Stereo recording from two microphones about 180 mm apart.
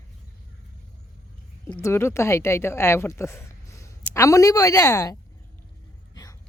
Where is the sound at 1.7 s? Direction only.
15° left (ahead or behind).